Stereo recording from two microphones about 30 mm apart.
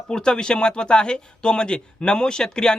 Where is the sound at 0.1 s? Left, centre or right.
Left.